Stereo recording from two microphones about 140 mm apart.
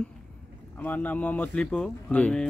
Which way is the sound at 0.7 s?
10° left (ahead or behind).